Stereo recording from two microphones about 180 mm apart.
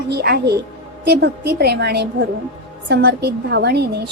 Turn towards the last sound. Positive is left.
turn(degrees=-65)  # may be behind; listen again after turning